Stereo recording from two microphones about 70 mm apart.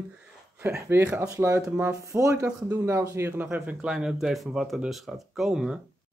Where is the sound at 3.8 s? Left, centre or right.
Centre.